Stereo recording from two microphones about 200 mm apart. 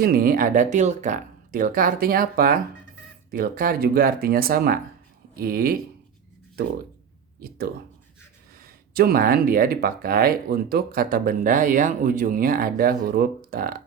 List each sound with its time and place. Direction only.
0.0 s speech: 50° right (ahead or behind)
7.3 s speech: 50° right (ahead or behind)